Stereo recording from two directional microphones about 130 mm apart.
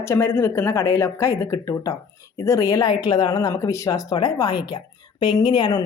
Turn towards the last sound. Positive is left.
turn(degrees=35)  # may be behind; listen again after turning